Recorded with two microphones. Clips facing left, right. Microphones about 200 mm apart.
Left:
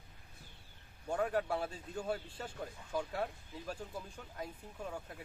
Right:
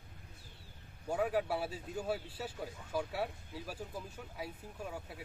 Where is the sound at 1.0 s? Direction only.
5° right (ahead or behind).